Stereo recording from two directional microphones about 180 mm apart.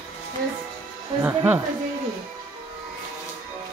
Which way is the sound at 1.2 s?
10° right (ahead or behind).